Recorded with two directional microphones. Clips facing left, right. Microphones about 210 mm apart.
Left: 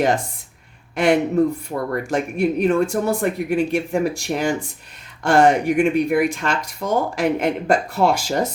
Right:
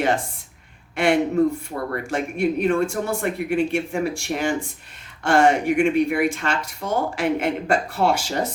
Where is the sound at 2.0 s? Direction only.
40° left (ahead or behind).